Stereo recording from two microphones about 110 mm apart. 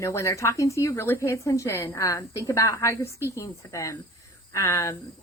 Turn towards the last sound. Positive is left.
turn(degrees=30)  # may be behind; listen again after turning